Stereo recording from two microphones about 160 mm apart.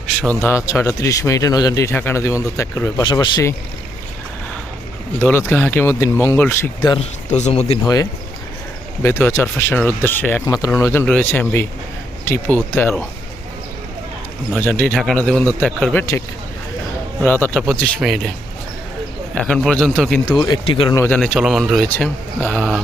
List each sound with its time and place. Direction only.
0.4 s a man's voice: 20° left (ahead or behind)
3.0 s speech: 30° left (ahead or behind)
5.2 s a man's voice: 15° left (ahead or behind)
7.0 s speech: 45° left (ahead or behind)
9.0 s a man's voice: 15° left (ahead or behind)
14.5 s a man's voice: 5° left (ahead or behind)
17.2 s a man's voice: 10° left (ahead or behind)
17.6 s speech: centre (ahead or behind)
19.3 s speech: 5° left (ahead or behind)
20.2 s a man's voice: 25° left (ahead or behind)
20.9 s a man's voice: 15° left (ahead or behind)
21.2 s speech: centre (ahead or behind)
21.8 s a man's voice: 10° left (ahead or behind)